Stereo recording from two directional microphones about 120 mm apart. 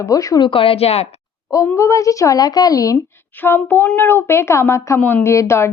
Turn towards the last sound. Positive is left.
turn(degrees=20)  # may be behind; listen again after turning